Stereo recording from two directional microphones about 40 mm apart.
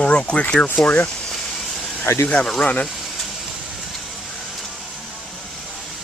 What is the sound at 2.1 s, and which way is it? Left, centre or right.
Speech, left.